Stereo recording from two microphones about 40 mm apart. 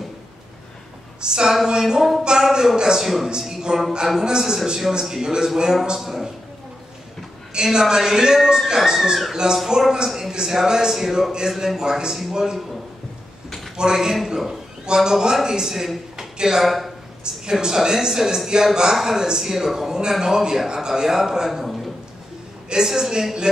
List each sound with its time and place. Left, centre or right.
1.2 s speech: centre
3.3 s a man's voice: centre
7.5 s a woman's voice: centre
13.7 s speech: centre
16.6 s speech: centre
17.2 s speech: centre
21.6 s a sound: centre
22.7 s speech: centre